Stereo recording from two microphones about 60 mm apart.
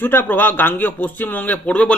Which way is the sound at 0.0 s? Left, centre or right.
Left.